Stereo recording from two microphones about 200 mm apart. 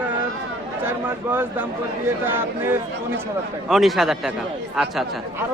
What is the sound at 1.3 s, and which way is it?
Speech, 10° right (ahead or behind).